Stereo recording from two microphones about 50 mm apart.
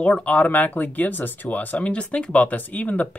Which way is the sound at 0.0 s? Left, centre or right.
Left.